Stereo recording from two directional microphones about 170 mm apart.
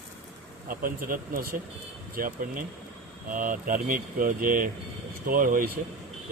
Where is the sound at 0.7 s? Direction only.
60° right (ahead or behind).